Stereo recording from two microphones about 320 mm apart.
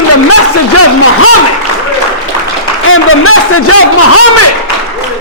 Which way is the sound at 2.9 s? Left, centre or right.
Left.